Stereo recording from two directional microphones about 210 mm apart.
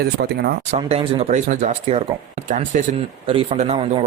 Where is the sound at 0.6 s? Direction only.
30° right (ahead or behind).